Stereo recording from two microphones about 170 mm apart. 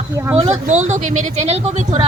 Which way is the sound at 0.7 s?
45° right (ahead or behind).